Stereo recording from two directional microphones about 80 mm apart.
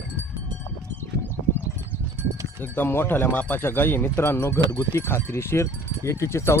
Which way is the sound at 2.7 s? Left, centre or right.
Left.